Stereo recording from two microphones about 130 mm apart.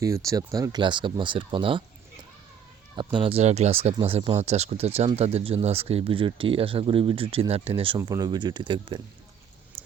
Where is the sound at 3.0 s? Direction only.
35° right (ahead or behind).